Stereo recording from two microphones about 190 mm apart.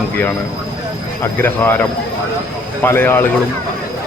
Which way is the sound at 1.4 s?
10° left (ahead or behind).